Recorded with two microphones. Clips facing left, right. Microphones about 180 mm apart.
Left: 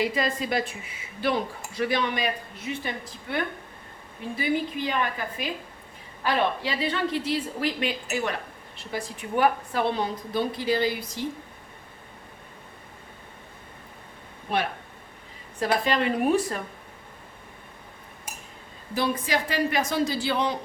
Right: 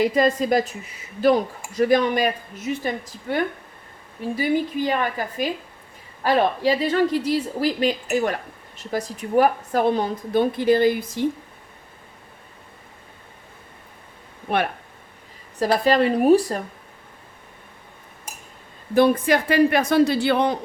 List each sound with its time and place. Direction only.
0.0 s a woman's voice: 45° right (ahead or behind)
14.5 s a man's voice: 55° right (ahead or behind)
15.5 s speech: 40° right (ahead or behind)
18.9 s a man's voice: 55° right (ahead or behind)